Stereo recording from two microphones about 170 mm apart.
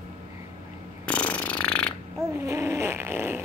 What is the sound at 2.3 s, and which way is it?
Snoring, 15° right (ahead or behind).